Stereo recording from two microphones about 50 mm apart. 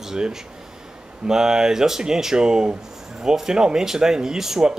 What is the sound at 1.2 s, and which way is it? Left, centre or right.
Speech, centre.